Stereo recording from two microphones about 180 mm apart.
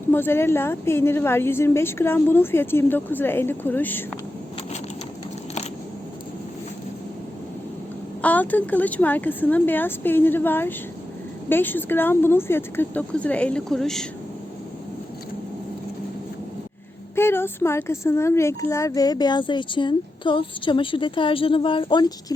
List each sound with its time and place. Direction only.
0.1 s a woman's voice: 10° left (ahead or behind)
8.2 s a woman's voice: 10° left (ahead or behind)
17.2 s speech: 15° left (ahead or behind)